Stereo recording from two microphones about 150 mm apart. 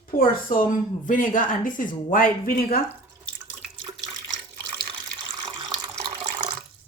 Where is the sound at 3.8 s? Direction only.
30° right (ahead or behind).